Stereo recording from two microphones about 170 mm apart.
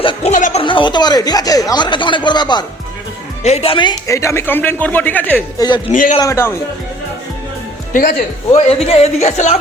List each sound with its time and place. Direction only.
0.0 s speech: 35° left (ahead or behind)
0.6 s speech: 30° left (ahead or behind)
3.4 s speech: 35° left (ahead or behind); by 5.4 s 10° left (ahead or behind)
5.5 s speech: 25° left (ahead or behind)
5.9 s a man's voice: 50° left (ahead or behind)
6.1 s speech: 20° left (ahead or behind)
7.9 s a man's voice: 50° left (ahead or behind)
8.6 s speech: 35° left (ahead or behind)